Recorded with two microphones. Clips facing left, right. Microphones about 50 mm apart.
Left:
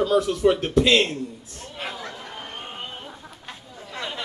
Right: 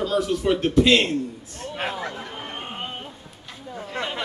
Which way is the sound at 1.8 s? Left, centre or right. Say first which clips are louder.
Right 4 dB; right.